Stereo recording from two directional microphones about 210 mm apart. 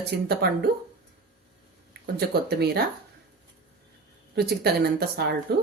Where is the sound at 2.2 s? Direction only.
50° right (ahead or behind).